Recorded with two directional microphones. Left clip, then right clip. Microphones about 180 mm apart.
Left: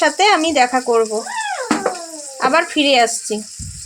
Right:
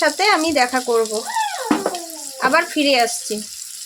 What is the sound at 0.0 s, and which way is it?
Speech, 15° left (ahead or behind).